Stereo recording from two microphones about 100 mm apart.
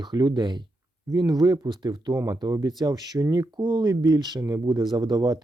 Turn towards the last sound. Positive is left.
turn(degrees=-40)  # may be behind; listen again after turning